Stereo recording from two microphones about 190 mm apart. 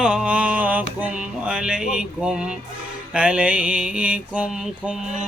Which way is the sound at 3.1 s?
5° right (ahead or behind).